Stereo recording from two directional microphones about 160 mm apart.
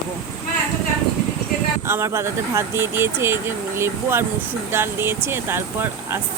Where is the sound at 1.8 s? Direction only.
15° right (ahead or behind).